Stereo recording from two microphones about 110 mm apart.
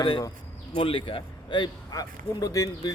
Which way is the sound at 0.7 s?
55° left (ahead or behind).